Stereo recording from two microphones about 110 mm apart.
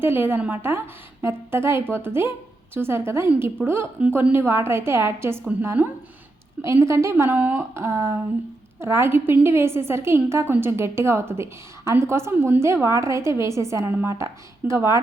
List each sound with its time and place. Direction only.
0.0 s a woman's voice: 20° right (ahead or behind)